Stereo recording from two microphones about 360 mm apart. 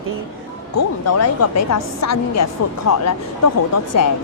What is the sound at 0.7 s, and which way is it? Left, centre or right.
Speech, left.